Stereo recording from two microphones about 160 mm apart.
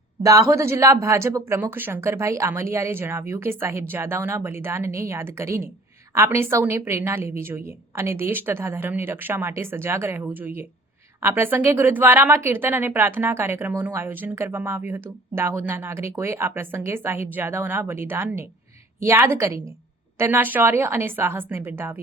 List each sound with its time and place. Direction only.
0.2 s speech: 20° right (ahead or behind)